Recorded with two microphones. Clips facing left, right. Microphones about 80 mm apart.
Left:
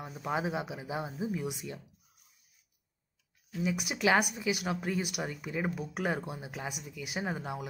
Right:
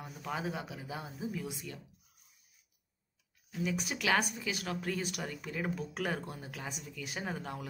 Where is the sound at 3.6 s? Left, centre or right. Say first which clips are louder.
Left 4 dB; centre.